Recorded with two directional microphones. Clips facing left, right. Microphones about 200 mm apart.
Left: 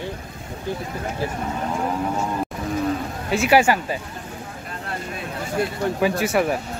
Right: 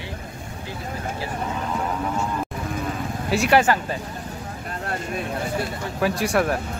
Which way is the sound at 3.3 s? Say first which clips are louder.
Left 1 dB; 5° left (ahead or behind).